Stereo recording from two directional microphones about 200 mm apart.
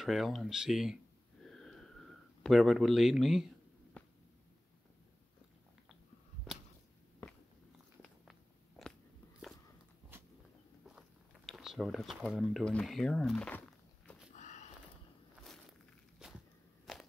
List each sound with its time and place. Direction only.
0.0 s speech: centre (ahead or behind)
1.4 s a sound: centre (ahead or behind)
8.0 s biting: centre (ahead or behind)
10.9 s speech: centre (ahead or behind)
14.3 s a sound: 35° left (ahead or behind)
16.2 s walk: 5° right (ahead or behind)
16.9 s crunch: centre (ahead or behind)